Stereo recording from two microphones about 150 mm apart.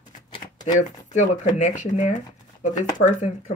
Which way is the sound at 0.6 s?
55° left (ahead or behind).